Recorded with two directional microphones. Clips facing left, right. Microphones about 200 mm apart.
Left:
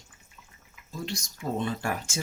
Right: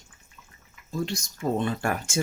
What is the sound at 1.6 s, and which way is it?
Speech, 55° right (ahead or behind).